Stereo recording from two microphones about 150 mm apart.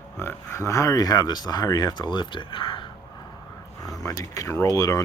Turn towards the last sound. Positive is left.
turn(degrees=20)  # may be behind; listen again after turning